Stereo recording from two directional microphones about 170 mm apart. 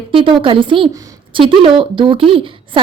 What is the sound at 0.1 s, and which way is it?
A woman's voice, 30° right (ahead or behind).